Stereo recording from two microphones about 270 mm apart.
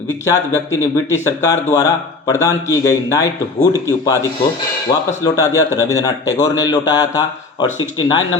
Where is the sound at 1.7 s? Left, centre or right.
Centre.